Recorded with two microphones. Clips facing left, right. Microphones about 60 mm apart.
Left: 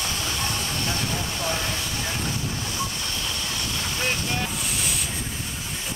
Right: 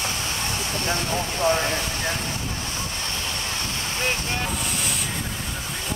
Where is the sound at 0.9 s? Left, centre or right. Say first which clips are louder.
Right 3 dB; right.